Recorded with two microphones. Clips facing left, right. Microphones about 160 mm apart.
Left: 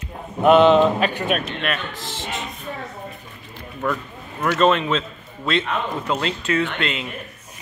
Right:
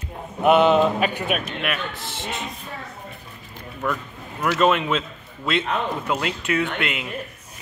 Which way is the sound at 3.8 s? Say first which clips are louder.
Left 2 dB; centre (ahead or behind).